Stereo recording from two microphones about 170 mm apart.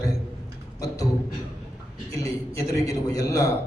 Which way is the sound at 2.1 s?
20° left (ahead or behind).